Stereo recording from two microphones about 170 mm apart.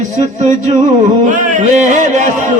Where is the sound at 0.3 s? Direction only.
45° right (ahead or behind).